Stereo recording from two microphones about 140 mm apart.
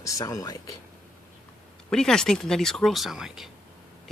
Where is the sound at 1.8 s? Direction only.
5° left (ahead or behind).